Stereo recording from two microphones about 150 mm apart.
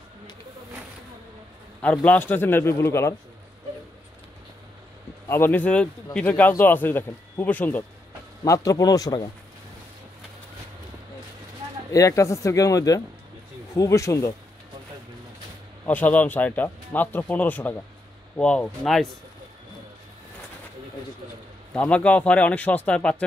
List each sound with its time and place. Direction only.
1.8 s speech: 10° left (ahead or behind)
5.3 s speech: 10° left (ahead or behind)
8.5 s speech: 20° left (ahead or behind)
11.9 s speech: 20° left (ahead or behind)
15.8 s speech: 10° left (ahead or behind)
21.7 s speech: 10° left (ahead or behind)